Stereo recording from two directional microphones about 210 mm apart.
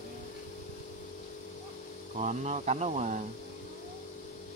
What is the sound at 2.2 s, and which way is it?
Speech, 35° right (ahead or behind).